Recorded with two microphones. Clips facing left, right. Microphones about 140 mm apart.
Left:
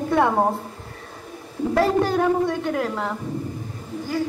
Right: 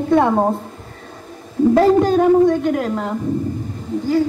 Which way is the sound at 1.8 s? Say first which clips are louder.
Right 5 dB; 20° right (ahead or behind).